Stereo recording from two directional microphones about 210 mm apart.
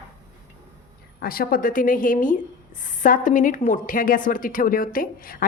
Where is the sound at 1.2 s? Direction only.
45° left (ahead or behind).